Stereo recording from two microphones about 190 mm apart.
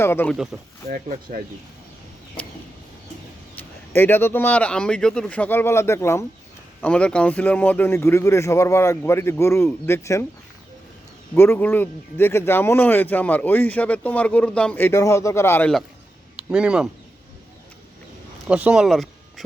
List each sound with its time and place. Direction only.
0.0 s a man's voice: 10° left (ahead or behind)
0.9 s speech: 45° right (ahead or behind)
3.6 s a man's voice: 10° left (ahead or behind)
11.3 s a man's voice: 10° left (ahead or behind)
16.4 s speech: 5° right (ahead or behind)
18.4 s speech: 5° right (ahead or behind)